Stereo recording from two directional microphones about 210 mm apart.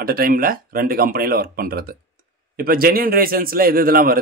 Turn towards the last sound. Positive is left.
turn(degrees=-45)  # may be behind; listen again after turning